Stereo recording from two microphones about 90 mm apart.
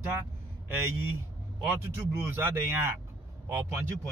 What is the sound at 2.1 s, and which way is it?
Speech, 30° right (ahead or behind).